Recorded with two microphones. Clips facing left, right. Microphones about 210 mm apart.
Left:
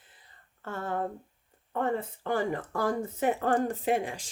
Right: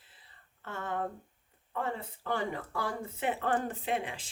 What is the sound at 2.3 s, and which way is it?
Speech, 50° left (ahead or behind).